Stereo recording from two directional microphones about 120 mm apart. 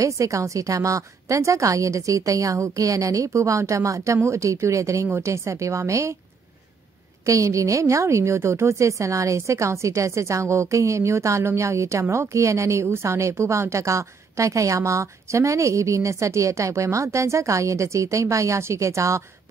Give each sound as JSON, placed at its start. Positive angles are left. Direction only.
{"t": 0.0, "sound": "a woman's voice", "side_deg": -25}
{"t": 7.2, "sound": "a woman's voice", "side_deg": -25}